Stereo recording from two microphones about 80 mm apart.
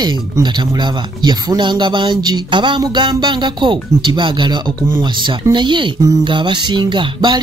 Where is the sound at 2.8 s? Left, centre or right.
Right.